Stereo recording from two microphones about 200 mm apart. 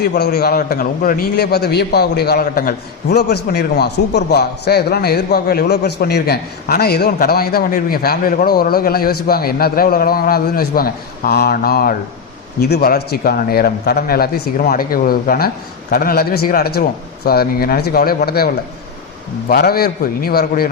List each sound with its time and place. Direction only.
0.0 s a man's voice: 55° left (ahead or behind)